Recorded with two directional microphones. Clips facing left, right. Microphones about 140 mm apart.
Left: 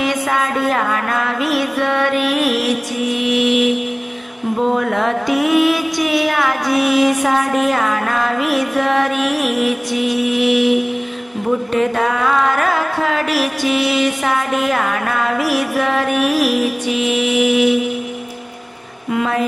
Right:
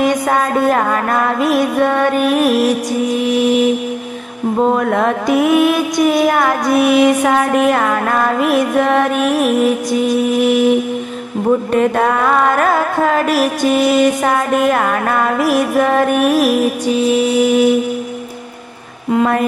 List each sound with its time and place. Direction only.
0.0 s carnatic music: 45° right (ahead or behind)
3.2 s mantra: 40° right (ahead or behind)
4.7 s mantra: 45° right (ahead or behind)
11.7 s carnatic music: 50° right (ahead or behind)
19.1 s carnatic music: 50° right (ahead or behind)